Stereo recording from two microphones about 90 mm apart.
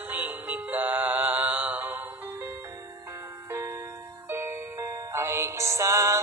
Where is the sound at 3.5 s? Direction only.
25° right (ahead or behind).